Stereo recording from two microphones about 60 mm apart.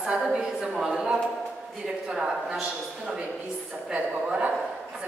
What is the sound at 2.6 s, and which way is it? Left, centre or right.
A woman's voice, centre.